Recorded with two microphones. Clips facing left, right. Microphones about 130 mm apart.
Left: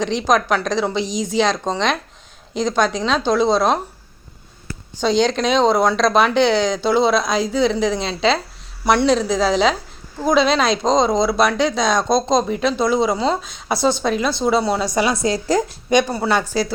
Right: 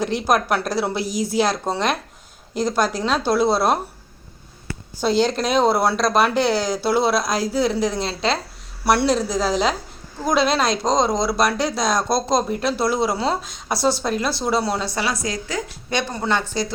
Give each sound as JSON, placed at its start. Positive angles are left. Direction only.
{"t": 0.0, "sound": "a woman's voice", "side_deg": -10}
{"t": 4.9, "sound": "speech", "side_deg": -5}
{"t": 14.8, "sound": "a woman's voice", "side_deg": 15}
{"t": 15.9, "sound": "speech", "side_deg": 15}